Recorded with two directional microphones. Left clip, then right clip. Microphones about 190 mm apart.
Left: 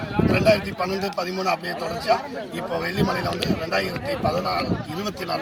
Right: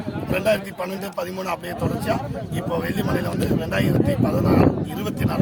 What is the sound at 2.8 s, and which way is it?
A man's voice, 35° right (ahead or behind).